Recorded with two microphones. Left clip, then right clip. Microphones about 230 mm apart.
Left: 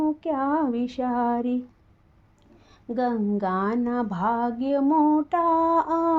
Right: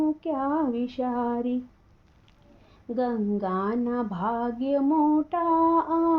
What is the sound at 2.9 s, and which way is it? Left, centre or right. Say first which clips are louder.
Female singing: left 2 dB; left.